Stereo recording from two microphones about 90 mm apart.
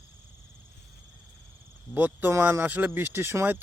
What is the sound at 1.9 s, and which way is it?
Speech, 25° right (ahead or behind).